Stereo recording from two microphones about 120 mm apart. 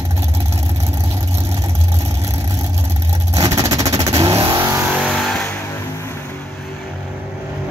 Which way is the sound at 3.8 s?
55° right (ahead or behind).